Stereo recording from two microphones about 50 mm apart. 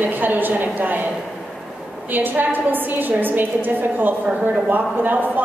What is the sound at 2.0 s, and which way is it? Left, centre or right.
A woman's voice, right.